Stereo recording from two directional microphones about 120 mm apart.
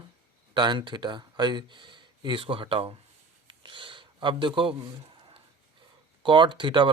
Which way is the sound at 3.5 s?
45° right (ahead or behind).